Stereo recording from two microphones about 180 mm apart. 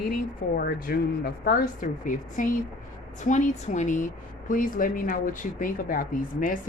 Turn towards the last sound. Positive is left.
turn(degrees=50)  # may be behind; listen again after turning